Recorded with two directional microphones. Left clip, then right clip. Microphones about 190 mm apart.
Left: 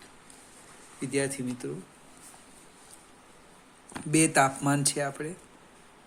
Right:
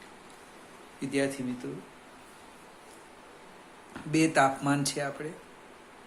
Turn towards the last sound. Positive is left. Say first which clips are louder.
# left 2 dB
turn(degrees=50)  # may be behind; listen again after turning